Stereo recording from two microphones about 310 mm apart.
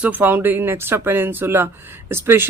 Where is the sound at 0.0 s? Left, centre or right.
Centre.